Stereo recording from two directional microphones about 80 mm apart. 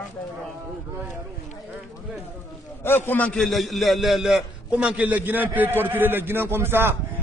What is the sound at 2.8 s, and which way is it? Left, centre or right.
Speech, left.